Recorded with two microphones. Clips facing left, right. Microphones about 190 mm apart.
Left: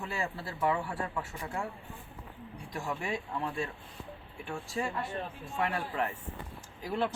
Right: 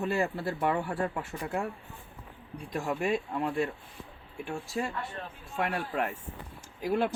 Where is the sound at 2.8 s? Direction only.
15° right (ahead or behind).